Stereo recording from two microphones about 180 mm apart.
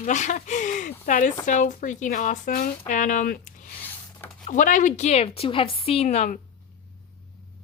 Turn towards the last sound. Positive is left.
turn(degrees=40)  # may be behind; listen again after turning